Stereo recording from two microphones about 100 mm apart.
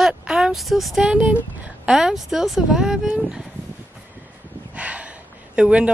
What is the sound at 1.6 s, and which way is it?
Speech, 10° right (ahead or behind).